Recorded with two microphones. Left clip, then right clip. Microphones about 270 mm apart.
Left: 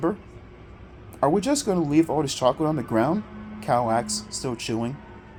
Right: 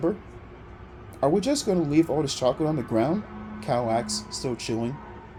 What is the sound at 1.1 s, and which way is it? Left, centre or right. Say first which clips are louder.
Speech: left 1 dB; left.